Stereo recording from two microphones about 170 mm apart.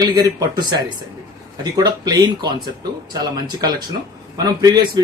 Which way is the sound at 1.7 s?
25° right (ahead or behind).